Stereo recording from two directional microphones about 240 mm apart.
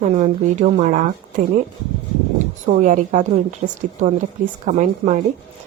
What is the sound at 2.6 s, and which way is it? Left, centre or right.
Speech, right.